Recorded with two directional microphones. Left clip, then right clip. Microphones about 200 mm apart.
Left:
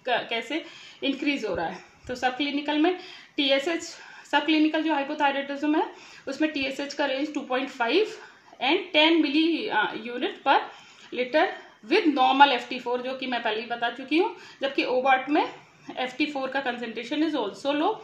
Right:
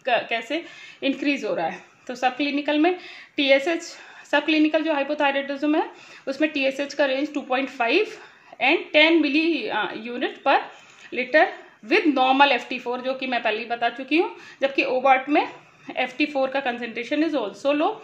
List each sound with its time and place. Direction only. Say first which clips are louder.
0.0 s a woman's voice: right 4 dB; 35° right (ahead or behind)